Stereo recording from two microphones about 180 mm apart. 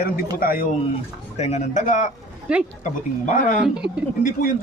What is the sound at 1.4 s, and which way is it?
Speech, 40° left (ahead or behind).